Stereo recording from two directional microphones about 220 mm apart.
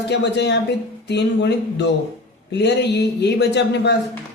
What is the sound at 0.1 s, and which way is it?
Speech, 50° left (ahead or behind).